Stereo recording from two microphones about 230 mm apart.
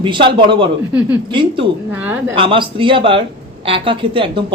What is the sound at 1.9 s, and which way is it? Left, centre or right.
Speech, centre.